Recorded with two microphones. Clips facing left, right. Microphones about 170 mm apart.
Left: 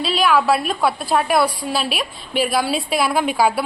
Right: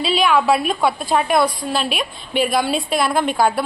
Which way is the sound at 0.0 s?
Centre (ahead or behind).